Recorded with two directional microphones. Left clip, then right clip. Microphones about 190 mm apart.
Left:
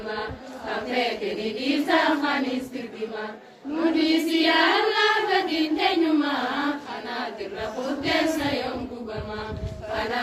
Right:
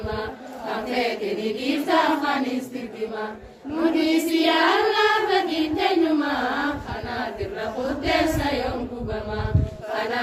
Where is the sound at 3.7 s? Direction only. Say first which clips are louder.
Right 1 dB; 55° right (ahead or behind).